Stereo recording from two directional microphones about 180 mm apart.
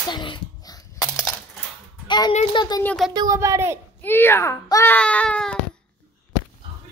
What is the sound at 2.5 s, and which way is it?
Speech, 25° left (ahead or behind).